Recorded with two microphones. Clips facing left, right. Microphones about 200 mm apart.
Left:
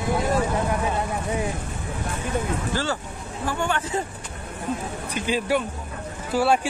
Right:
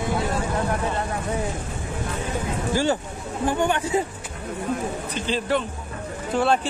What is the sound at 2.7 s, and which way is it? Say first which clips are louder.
Speech: right 4 dB; 15° right (ahead or behind).